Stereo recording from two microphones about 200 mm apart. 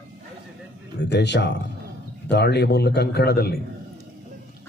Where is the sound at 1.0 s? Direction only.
60° left (ahead or behind).